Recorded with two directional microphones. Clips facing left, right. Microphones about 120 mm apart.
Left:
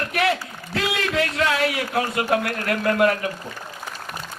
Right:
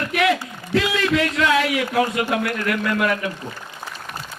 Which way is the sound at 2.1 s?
35° left (ahead or behind).